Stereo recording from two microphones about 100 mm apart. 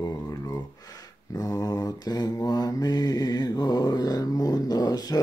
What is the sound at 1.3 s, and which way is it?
Mantra, 35° left (ahead or behind).